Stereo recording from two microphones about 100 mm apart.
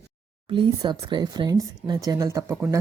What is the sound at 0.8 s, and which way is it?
Speech, 45° right (ahead or behind).